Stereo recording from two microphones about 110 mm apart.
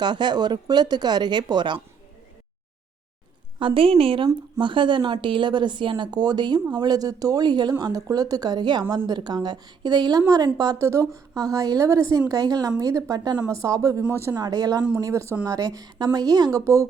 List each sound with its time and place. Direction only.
0.0 s speech: 40° right (ahead or behind)
3.6 s a woman's voice: 50° right (ahead or behind); by 14.3 s 20° right (ahead or behind)
14.3 s speech: 35° right (ahead or behind)